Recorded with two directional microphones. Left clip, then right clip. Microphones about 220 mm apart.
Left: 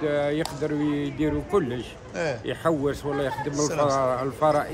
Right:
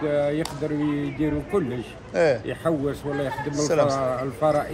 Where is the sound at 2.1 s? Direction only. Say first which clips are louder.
Right 7 dB; 15° left (ahead or behind).